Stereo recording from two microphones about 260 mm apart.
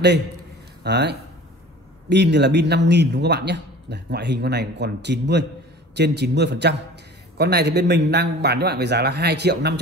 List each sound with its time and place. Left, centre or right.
0.8 s speech: right